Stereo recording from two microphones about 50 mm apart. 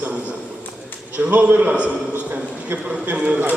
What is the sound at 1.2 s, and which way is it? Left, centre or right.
Speech, right.